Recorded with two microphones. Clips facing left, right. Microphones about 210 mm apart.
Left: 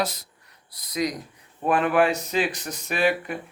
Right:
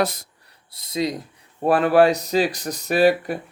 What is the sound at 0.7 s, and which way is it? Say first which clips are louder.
Speech: right 3 dB; 25° right (ahead or behind).